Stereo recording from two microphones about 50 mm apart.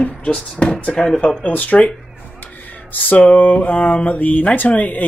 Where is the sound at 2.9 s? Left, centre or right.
Left.